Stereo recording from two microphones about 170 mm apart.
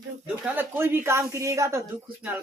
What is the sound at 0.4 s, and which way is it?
A woman's voice, 10° right (ahead or behind).